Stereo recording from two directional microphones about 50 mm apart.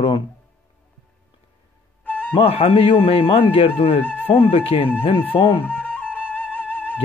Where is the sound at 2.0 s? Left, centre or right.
Left.